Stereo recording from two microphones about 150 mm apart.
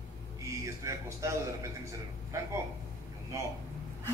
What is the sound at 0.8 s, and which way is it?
Speech, 20° right (ahead or behind).